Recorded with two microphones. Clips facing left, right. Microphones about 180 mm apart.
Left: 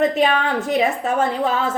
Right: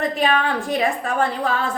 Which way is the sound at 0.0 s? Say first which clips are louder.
Left 3 dB; 20° left (ahead or behind).